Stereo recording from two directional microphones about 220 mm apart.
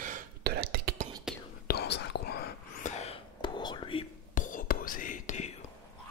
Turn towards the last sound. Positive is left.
turn(degrees=35)  # may be behind; listen again after turning